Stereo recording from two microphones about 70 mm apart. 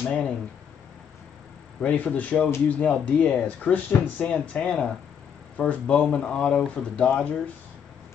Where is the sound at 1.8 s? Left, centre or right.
Left.